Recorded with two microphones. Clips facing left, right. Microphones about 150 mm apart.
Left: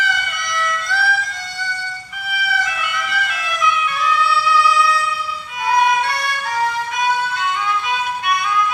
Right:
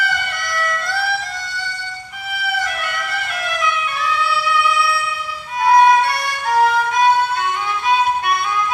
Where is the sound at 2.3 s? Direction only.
55° right (ahead or behind).